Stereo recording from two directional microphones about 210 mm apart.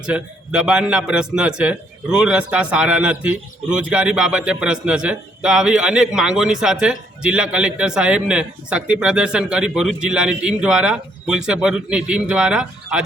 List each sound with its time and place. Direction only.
0.0 s a man's voice: 5° right (ahead or behind)